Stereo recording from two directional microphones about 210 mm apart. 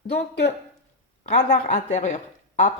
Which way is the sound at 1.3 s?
35° left (ahead or behind).